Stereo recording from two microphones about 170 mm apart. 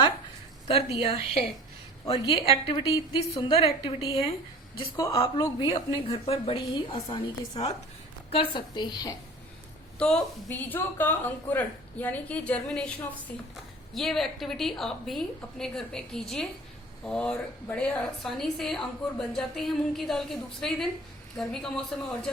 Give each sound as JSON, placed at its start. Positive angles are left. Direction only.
{"t": 0.7, "sound": "a woman's voice", "side_deg": 35}
{"t": 4.9, "sound": "a woman's voice", "side_deg": 20}
{"t": 10.0, "sound": "a woman's voice", "side_deg": 5}
{"t": 13.9, "sound": "a woman's voice", "side_deg": 0}